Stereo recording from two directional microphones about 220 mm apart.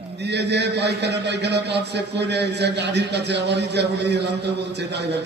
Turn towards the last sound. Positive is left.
turn(degrees=-50)  # may be behind; listen again after turning